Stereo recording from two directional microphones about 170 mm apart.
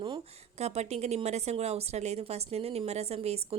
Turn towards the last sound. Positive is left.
turn(degrees=-35)  # may be behind; listen again after turning